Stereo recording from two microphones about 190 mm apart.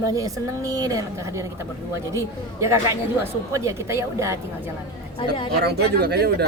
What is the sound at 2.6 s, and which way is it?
A woman's voice, 15° right (ahead or behind).